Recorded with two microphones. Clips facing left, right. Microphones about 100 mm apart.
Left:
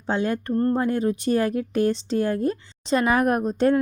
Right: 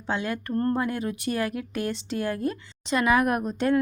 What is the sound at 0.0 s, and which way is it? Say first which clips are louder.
Speech: left 5 dB; 35° left (ahead or behind).